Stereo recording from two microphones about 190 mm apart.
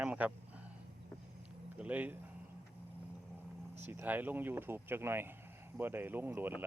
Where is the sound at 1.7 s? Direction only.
5° right (ahead or behind).